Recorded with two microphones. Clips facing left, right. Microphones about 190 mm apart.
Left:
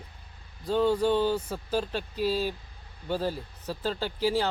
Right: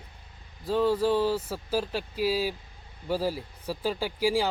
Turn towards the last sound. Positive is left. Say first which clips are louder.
# right 1 dB
turn(degrees=-10)  # may be behind; listen again after turning